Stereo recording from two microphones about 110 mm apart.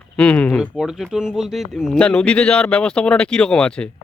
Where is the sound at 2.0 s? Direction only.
10° left (ahead or behind).